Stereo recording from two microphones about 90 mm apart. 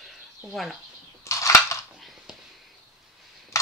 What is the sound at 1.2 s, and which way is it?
Crushing, 35° left (ahead or behind).